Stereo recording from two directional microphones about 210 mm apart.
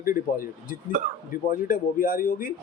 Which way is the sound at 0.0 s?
40° left (ahead or behind).